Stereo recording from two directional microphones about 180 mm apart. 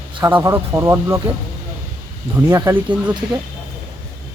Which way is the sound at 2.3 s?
15° right (ahead or behind).